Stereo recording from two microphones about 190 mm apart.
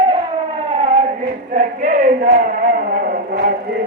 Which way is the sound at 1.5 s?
45° right (ahead or behind).